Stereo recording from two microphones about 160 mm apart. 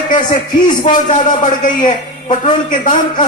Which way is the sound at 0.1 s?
55° left (ahead or behind).